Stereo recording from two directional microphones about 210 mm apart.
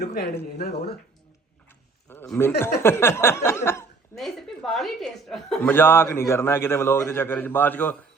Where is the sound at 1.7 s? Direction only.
10° left (ahead or behind).